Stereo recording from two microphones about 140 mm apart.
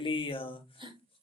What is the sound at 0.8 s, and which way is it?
Speech, 35° right (ahead or behind).